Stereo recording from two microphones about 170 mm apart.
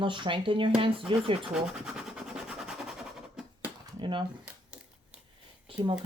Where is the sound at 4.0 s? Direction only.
30° right (ahead or behind).